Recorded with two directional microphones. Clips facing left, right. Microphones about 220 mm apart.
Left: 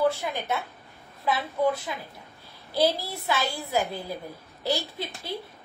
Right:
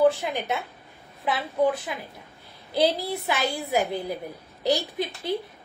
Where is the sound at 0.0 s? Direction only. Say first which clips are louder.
Right 4 dB; 20° right (ahead or behind).